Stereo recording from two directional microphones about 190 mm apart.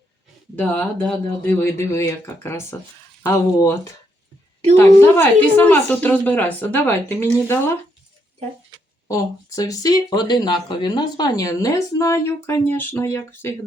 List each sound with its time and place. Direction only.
0.5 s speech: 5° left (ahead or behind)
4.8 s speech: 10° left (ahead or behind)
9.0 s speech: 15° left (ahead or behind)